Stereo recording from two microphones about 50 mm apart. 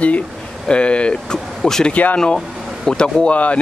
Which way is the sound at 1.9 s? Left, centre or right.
Left.